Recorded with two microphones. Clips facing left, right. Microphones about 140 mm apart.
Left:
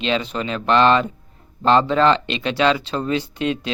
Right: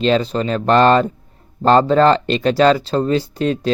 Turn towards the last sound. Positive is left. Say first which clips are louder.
# right 5 dB
turn(degrees=-40)  # may be behind; listen again after turning